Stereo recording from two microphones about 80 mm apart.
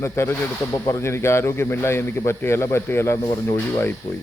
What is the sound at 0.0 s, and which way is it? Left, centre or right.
Speech, left.